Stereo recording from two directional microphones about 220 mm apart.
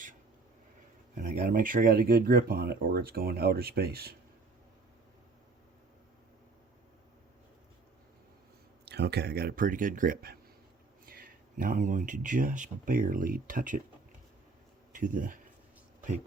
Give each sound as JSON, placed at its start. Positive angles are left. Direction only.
{"t": 1.1, "sound": "speech", "side_deg": -40}
{"t": 8.9, "sound": "speech", "side_deg": -45}
{"t": 14.9, "sound": "speech", "side_deg": -35}